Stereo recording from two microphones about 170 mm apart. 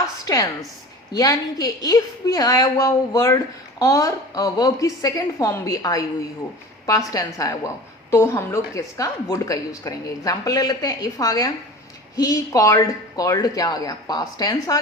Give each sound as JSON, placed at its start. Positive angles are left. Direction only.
{"t": 0.3, "sound": "a woman's voice", "side_deg": 20}